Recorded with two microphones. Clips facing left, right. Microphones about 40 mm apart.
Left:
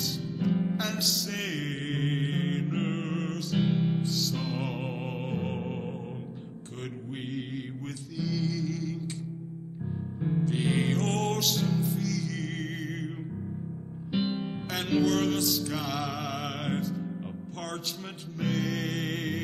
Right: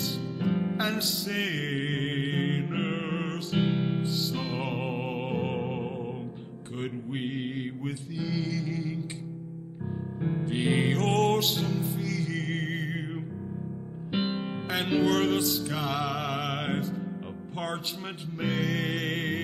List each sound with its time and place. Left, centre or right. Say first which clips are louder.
0.0 s music: right 1 dB; centre
1.9 s mantra: right 1 dB; centre
2.7 s music: right 1 dB; right
3.3 s music: even; centre
3.7 s music: even; right
4.4 s music: right 1 dB; centre
5.5 s music: right 3 dB; right
8.2 s music: left 1 dB; centre
10.2 s music: even; right
11.1 s music: right 5 dB; centre
11.4 s music: left 1 dB; centre
14.1 s music: even; right
18.4 s music: right 1 dB; centre